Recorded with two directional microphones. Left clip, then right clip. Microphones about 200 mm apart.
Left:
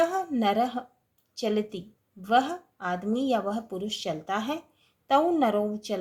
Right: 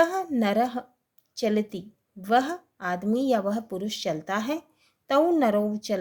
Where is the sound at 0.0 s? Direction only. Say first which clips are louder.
Right 1 dB; 35° right (ahead or behind).